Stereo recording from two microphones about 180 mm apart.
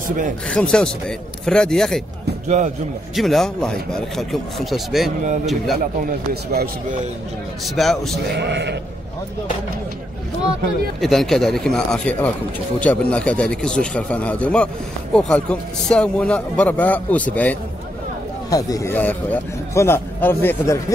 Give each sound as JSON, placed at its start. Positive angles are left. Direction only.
{"t": 0.5, "sound": "a man's voice", "side_deg": 5}
{"t": 2.4, "sound": "a man's voice", "side_deg": -40}
{"t": 3.2, "sound": "a man's voice", "side_deg": 0}
{"t": 5.2, "sound": "a man's voice", "side_deg": -45}
{"t": 5.9, "sound": "speech", "side_deg": -55}
{"t": 7.6, "sound": "a man's voice", "side_deg": 0}
{"t": 8.4, "sound": "speech", "side_deg": -70}
{"t": 11.0, "sound": "a man's voice", "side_deg": 0}
{"t": 18.5, "sound": "a man's voice", "side_deg": 20}